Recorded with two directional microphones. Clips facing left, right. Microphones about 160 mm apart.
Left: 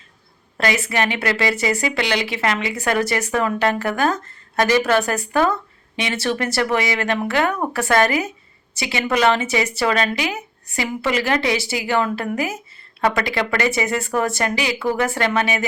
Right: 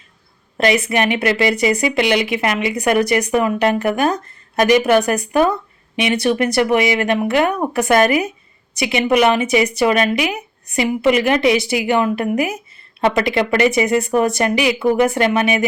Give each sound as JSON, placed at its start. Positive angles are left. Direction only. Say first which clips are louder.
{"t": 0.5, "sound": "speech", "louder": "right 5 dB", "side_deg": -20}